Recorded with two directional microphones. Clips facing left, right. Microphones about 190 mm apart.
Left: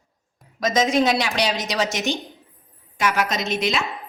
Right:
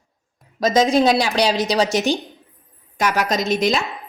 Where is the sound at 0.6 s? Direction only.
30° right (ahead or behind).